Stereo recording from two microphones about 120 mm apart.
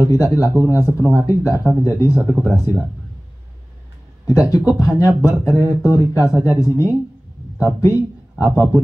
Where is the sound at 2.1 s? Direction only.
20° right (ahead or behind).